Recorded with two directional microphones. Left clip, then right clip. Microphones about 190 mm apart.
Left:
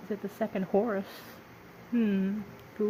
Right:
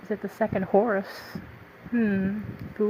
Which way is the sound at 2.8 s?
35° right (ahead or behind).